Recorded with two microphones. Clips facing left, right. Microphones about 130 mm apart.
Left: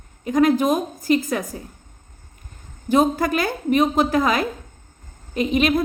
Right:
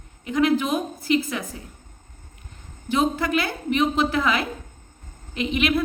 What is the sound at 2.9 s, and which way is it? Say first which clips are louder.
A woman's voice: left 4 dB; 40° left (ahead or behind).